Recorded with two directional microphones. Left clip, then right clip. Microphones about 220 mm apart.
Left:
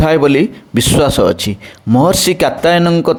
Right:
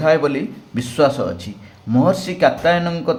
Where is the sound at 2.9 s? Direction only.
35° left (ahead or behind).